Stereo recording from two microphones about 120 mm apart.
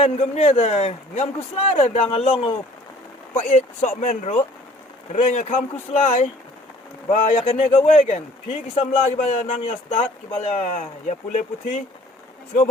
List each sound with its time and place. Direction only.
0.0 s a man's voice: 65° left (ahead or behind)
3.3 s speech: 75° left (ahead or behind)
5.1 s speech: 70° left (ahead or behind)
8.7 s a man's voice: 55° left (ahead or behind)
9.3 s speech: 75° left (ahead or behind); by 11.8 s 90° left